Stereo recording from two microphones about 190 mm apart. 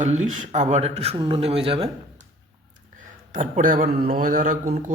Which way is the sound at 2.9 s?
40° right (ahead or behind).